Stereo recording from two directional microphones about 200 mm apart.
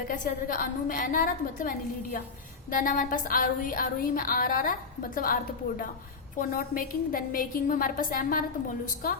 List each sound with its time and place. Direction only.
0.1 s a woman's voice: 45° left (ahead or behind)